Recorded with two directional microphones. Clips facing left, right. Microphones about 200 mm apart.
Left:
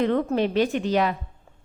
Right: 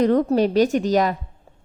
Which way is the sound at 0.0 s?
40° right (ahead or behind).